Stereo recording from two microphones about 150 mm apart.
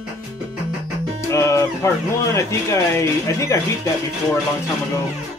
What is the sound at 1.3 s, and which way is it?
Speech, 20° left (ahead or behind).